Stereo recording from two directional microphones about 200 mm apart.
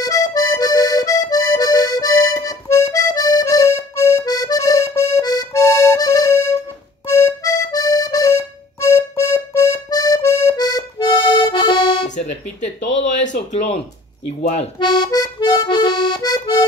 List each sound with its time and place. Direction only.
0.0 s accordion: 20° left (ahead or behind)
8.9 s music: 15° left (ahead or behind)
11.3 s accordion: 25° left (ahead or behind)
12.9 s a sound: 35° left (ahead or behind)
14.4 s music: 30° left (ahead or behind)